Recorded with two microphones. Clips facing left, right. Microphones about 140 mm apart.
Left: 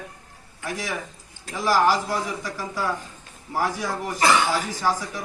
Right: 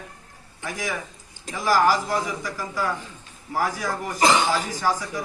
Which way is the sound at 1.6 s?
Centre (ahead or behind).